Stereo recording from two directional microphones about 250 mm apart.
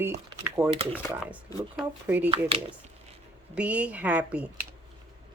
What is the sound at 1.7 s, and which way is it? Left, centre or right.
Speech, centre.